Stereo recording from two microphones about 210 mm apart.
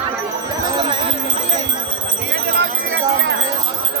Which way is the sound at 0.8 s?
25° right (ahead or behind).